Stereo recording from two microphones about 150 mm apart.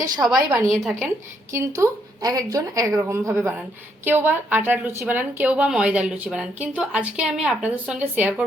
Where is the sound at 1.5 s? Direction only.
20° right (ahead or behind).